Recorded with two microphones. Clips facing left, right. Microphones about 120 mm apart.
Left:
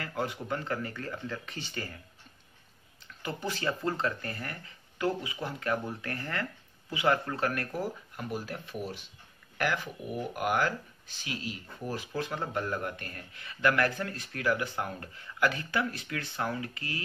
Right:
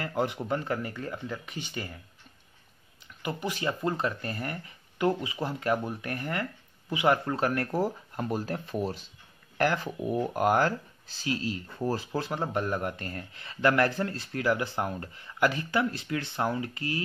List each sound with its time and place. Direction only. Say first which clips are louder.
0.0 s speech: right 4 dB; 25° right (ahead or behind)
3.2 s speech: right 2 dB; 15° right (ahead or behind); by 10.7 s 35° right (ahead or behind)
11.8 s speech: right 4 dB; 35° right (ahead or behind)